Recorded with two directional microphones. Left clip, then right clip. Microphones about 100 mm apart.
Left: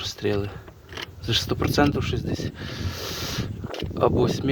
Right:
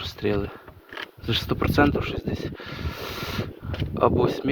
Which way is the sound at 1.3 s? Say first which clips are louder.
Left 1 dB; 30° left (ahead or behind).